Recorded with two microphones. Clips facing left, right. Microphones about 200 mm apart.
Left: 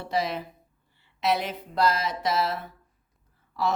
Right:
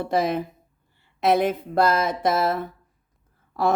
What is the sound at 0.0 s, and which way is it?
Speech, 50° right (ahead or behind).